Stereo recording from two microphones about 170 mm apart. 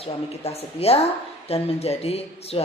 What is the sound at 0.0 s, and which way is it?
Speech, 35° left (ahead or behind).